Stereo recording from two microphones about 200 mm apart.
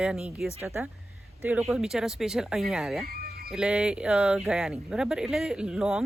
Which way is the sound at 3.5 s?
5° right (ahead or behind).